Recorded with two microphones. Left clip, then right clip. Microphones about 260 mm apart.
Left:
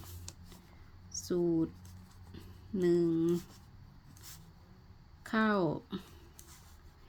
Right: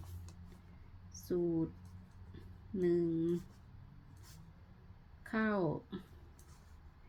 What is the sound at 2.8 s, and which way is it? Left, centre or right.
Speech, left.